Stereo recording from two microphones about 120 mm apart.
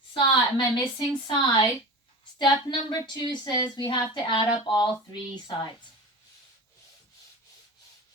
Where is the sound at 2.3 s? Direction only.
40° left (ahead or behind).